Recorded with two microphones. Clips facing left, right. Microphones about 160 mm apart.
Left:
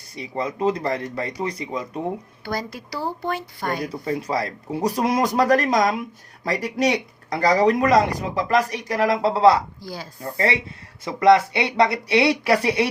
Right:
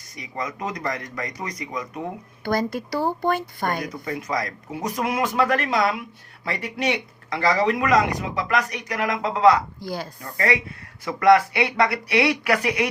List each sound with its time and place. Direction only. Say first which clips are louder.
0.2 s speech: left 6 dB; 30° left (ahead or behind)
2.4 s a woman's voice: right 9 dB; 50° right (ahead or behind)
3.8 s speech: left 3 dB; 30° left (ahead or behind)
9.8 s a woman's voice: right 4 dB; 55° right (ahead or behind)
10.2 s speech: left 2 dB; 30° left (ahead or behind)